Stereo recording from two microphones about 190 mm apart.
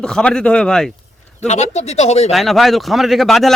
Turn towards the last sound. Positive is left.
turn(degrees=0)  # may be behind; listen again after turning